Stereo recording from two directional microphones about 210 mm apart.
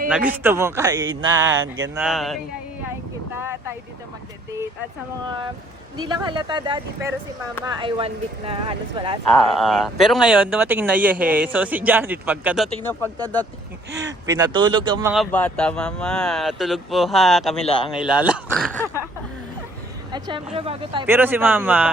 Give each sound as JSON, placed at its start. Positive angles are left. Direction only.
{"t": 0.1, "sound": "speech", "side_deg": -5}
{"t": 1.6, "sound": "mantra", "side_deg": -65}
{"t": 2.0, "sound": "speech", "side_deg": 0}
{"t": 3.3, "sound": "vehicle", "side_deg": -10}
{"t": 6.0, "sound": "speech", "side_deg": -20}
{"t": 9.3, "sound": "speech", "side_deg": 0}
{"t": 13.2, "sound": "speech", "side_deg": 10}
{"t": 14.3, "sound": "speech", "side_deg": -20}
{"t": 15.1, "sound": "speech", "side_deg": 5}
{"t": 20.1, "sound": "speech", "side_deg": -20}
{"t": 21.1, "sound": "speech", "side_deg": -10}